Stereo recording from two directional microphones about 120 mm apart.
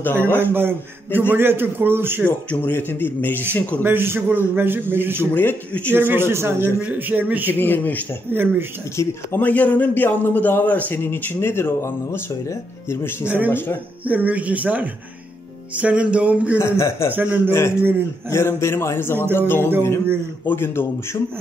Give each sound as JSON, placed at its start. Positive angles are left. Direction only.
{"t": 0.0, "sound": "a man's voice", "side_deg": 15}
{"t": 0.4, "sound": "a man's voice", "side_deg": -20}
{"t": 2.2, "sound": "a man's voice", "side_deg": 15}
{"t": 3.8, "sound": "a man's voice", "side_deg": -20}
{"t": 5.3, "sound": "a man's voice", "side_deg": 15}
{"t": 5.9, "sound": "a man's voice", "side_deg": -20}
{"t": 7.5, "sound": "a man's voice", "side_deg": 15}
{"t": 8.3, "sound": "a man's voice", "side_deg": -15}
{"t": 8.9, "sound": "a man's voice", "side_deg": 15}
{"t": 14.0, "sound": "a man's voice", "side_deg": -15}
{"t": 16.5, "sound": "a man's voice", "side_deg": 25}
{"t": 17.1, "sound": "a man's voice", "side_deg": -15}
{"t": 17.5, "sound": "a man's voice", "side_deg": 20}